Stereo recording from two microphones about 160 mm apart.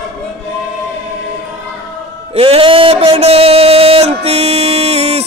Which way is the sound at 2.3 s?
35° right (ahead or behind).